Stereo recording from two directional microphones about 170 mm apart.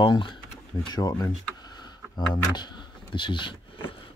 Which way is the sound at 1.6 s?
25° left (ahead or behind).